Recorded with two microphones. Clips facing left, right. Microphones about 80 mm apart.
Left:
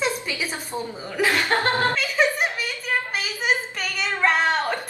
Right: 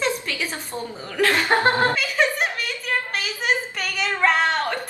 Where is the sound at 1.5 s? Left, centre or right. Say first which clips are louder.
Right 3 dB; right.